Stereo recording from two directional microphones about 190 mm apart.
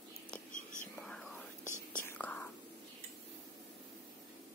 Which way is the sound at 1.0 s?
5° left (ahead or behind).